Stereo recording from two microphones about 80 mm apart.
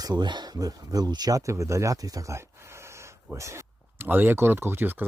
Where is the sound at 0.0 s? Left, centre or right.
Right.